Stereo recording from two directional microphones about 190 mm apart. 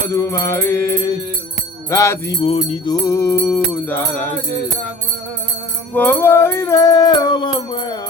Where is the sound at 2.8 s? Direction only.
15° left (ahead or behind).